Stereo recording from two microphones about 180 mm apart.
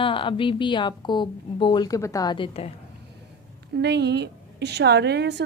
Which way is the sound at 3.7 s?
70° right (ahead or behind).